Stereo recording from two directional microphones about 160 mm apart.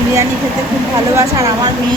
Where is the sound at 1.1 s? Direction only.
20° right (ahead or behind).